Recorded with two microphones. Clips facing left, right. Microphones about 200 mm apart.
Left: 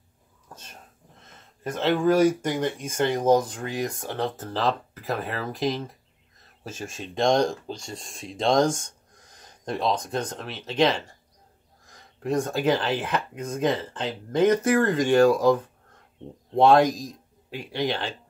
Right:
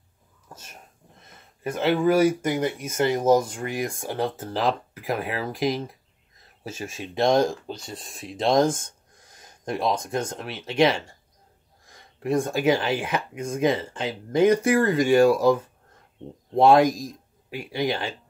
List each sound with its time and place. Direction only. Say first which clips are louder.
0.5 s speech: even; 10° right (ahead or behind)